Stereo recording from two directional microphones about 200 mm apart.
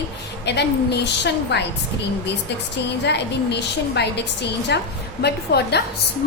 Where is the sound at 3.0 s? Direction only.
55° left (ahead or behind).